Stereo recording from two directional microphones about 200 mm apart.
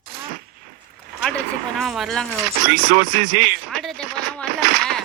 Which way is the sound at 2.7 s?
40° right (ahead or behind).